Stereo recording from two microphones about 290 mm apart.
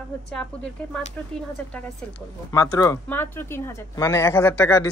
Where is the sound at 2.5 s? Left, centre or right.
Centre.